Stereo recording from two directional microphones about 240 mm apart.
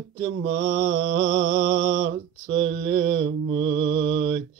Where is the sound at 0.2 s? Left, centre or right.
Right.